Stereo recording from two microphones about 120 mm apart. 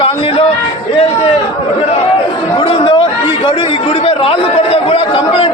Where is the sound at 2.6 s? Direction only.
50° left (ahead or behind).